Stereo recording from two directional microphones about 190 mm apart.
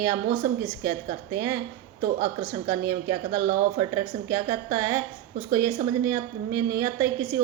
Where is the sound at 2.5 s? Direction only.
15° right (ahead or behind).